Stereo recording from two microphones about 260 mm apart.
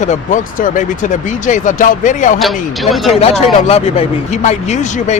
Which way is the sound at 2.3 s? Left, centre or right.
Centre.